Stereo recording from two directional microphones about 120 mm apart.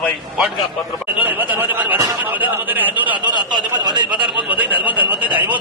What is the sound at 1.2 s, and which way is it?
A man's voice, 15° right (ahead or behind).